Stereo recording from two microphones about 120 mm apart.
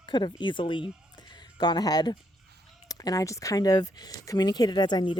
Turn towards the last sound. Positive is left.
turn(degrees=40)  # may be behind; listen again after turning